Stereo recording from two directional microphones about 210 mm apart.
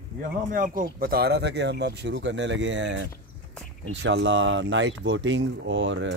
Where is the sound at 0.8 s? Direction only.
45° right (ahead or behind).